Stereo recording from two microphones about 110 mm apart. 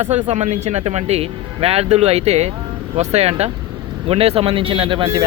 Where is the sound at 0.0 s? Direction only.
80° right.